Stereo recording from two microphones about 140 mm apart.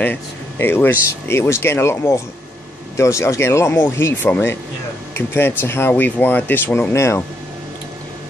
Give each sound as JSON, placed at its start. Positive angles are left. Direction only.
{"t": 0.0, "sound": "speech", "side_deg": 15}